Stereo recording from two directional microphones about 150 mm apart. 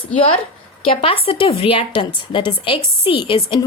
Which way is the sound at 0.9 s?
40° left (ahead or behind).